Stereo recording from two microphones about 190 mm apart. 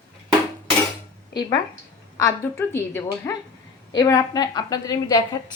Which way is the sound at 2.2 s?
15° left (ahead or behind).